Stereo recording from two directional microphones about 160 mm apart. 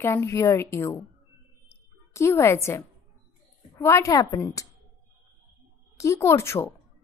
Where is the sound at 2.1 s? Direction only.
15° left (ahead or behind).